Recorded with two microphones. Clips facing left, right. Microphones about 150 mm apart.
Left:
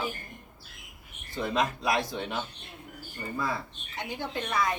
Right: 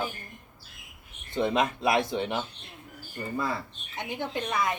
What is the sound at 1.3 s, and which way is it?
A woman's voice, 25° right (ahead or behind).